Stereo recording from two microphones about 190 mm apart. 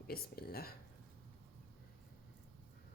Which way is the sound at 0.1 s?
55° left (ahead or behind).